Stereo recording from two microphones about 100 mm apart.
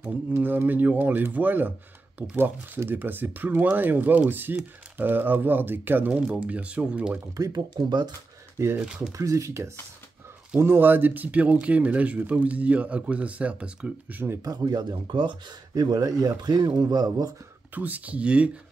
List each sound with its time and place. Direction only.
0.0 s speech: 20° right (ahead or behind)
7.3 s speech: 40° right (ahead or behind)
8.7 s speech: 5° right (ahead or behind)
9.1 s speech: 30° right (ahead or behind)
14.4 s speech: 40° right (ahead or behind)
17.7 s speech: 15° right (ahead or behind)